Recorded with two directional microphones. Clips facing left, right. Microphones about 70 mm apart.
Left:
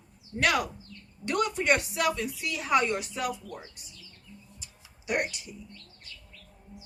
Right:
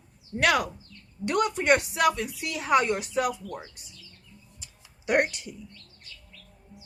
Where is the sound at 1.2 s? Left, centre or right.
Right.